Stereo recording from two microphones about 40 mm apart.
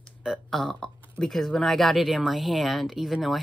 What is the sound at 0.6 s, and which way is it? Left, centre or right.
Speech, left.